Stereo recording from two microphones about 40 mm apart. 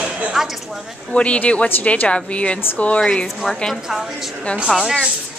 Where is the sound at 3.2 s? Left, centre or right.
Centre.